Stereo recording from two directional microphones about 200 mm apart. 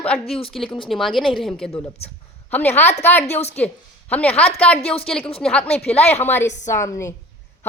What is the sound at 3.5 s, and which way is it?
A woman's voice, 5° left (ahead or behind).